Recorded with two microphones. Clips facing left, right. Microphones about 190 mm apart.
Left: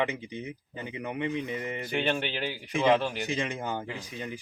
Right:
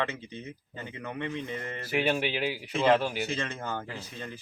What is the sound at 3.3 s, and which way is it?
Speech, 15° left (ahead or behind).